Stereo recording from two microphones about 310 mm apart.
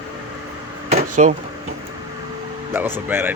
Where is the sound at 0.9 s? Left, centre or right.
Right.